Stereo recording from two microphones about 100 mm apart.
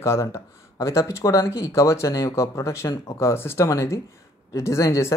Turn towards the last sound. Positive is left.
turn(degrees=30)  # may be behind; listen again after turning